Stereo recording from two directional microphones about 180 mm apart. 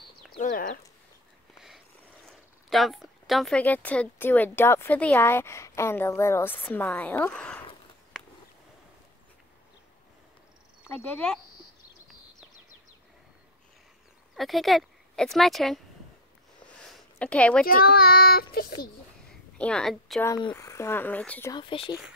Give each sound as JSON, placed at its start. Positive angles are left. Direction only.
{"t": 0.4, "sound": "speech", "side_deg": 50}
{"t": 2.2, "sound": "speech", "side_deg": 0}
{"t": 11.2, "sound": "a woman's voice", "side_deg": 5}
{"t": 14.3, "sound": "speech", "side_deg": 0}
{"t": 16.9, "sound": "a sound", "side_deg": 5}
{"t": 17.6, "sound": "a child's voice", "side_deg": 55}
{"t": 19.6, "sound": "a woman's voice", "side_deg": 5}
{"t": 20.2, "sound": "speech", "side_deg": 20}
{"t": 21.5, "sound": "speech", "side_deg": 25}